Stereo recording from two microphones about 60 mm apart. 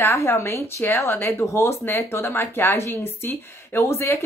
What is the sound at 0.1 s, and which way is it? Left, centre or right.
Speech, left.